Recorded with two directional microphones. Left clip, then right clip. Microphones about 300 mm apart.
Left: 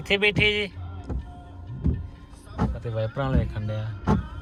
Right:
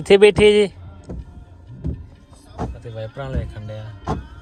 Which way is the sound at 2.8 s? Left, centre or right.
Centre.